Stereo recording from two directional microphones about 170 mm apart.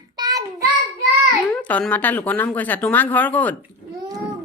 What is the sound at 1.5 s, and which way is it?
Speech, 10° left (ahead or behind).